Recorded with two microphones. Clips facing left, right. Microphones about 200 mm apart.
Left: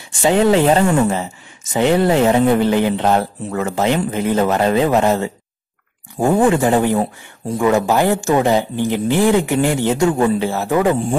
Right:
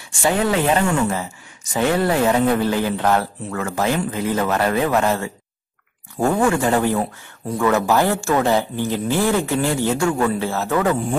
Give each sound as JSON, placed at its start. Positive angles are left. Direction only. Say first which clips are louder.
{"t": 0.2, "sound": "speech", "louder": "left 6 dB", "side_deg": 25}
{"t": 6.4, "sound": "speech", "louder": "left 4 dB", "side_deg": 20}